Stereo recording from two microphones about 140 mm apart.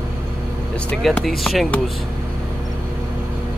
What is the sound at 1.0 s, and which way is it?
Speech, centre (ahead or behind).